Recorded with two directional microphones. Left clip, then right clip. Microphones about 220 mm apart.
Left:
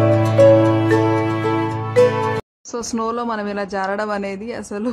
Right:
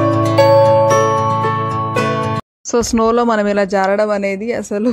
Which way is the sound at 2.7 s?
25° right (ahead or behind).